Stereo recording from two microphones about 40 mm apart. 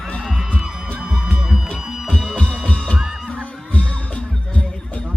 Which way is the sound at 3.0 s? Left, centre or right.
Centre.